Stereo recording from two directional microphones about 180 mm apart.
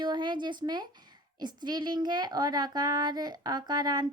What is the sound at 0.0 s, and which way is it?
A woman's voice, 25° right (ahead or behind).